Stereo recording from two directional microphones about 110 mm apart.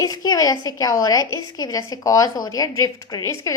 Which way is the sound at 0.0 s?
35° left (ahead or behind).